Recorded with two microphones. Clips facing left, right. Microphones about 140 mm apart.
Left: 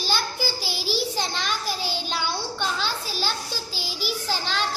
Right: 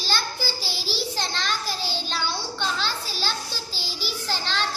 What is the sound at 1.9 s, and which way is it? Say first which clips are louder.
Child singing: left 1 dB; 10° left (ahead or behind).